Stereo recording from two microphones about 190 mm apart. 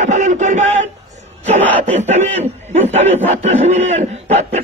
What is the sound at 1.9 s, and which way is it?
A man's voice, 40° right (ahead or behind).